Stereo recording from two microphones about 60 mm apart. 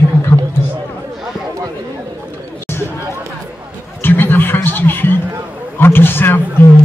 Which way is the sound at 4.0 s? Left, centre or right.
Left.